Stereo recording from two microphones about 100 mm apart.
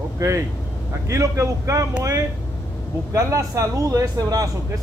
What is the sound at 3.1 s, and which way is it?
A man's voice, 30° right (ahead or behind).